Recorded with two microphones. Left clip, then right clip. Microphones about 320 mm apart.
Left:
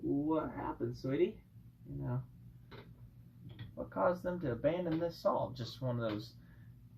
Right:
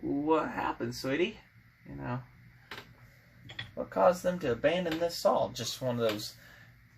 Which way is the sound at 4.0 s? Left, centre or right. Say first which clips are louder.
Right 8 dB; right.